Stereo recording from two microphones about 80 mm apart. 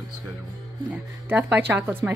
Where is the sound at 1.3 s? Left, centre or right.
Right.